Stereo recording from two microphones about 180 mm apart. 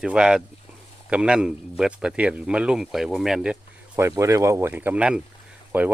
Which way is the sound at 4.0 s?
15° right (ahead or behind).